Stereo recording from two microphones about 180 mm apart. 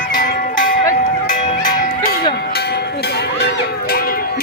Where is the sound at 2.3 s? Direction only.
65° left (ahead or behind).